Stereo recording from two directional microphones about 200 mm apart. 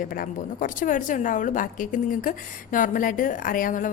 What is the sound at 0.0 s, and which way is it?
A woman's voice, 45° left (ahead or behind).